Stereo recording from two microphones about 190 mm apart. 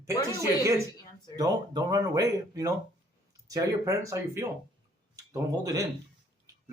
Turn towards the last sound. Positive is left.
turn(degrees=-20)  # may be behind; listen again after turning